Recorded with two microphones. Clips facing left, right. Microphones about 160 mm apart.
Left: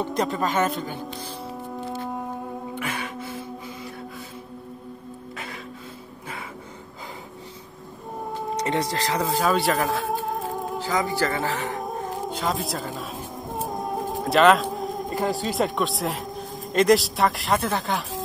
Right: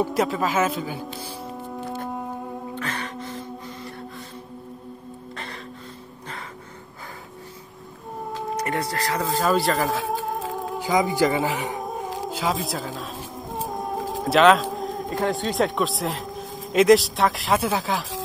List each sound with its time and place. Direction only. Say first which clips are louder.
0.0 s speech: right 2 dB; 5° right (ahead or behind)
2.0 s music: even; centre (ahead or behind)
2.7 s music: left 1 dB; 10° left (ahead or behind)
5.3 s music: even; 5° left (ahead or behind)
8.6 s speech: left 2 dB; 20° left (ahead or behind)
9.4 s speech: right 2 dB; centre (ahead or behind)
10.5 s music: even; centre (ahead or behind)
10.8 s speech: right 5 dB; 15° right (ahead or behind)
11.8 s music: even; 5° right (ahead or behind)
13.8 s speech: right 1 dB; centre (ahead or behind)